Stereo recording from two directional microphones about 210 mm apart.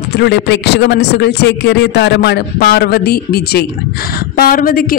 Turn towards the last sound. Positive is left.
turn(degrees=40)  # may be behind; listen again after turning